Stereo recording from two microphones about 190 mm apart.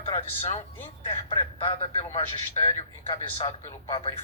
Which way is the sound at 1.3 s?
30° left (ahead or behind).